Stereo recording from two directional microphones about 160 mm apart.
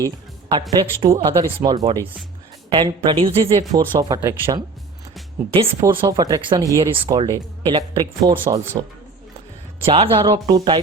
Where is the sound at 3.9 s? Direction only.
20° right (ahead or behind).